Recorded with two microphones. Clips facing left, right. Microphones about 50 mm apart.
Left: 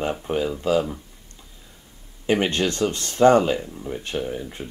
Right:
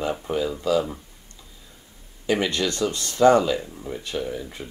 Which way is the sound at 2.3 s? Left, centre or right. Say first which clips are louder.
Left 2 dB; left.